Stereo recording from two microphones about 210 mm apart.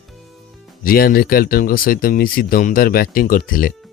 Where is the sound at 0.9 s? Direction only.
45° left (ahead or behind).